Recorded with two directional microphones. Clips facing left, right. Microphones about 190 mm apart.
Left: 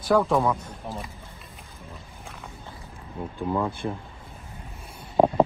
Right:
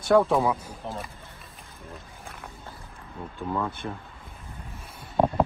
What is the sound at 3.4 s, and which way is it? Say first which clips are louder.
Speech: left 3 dB; 15° left (ahead or behind).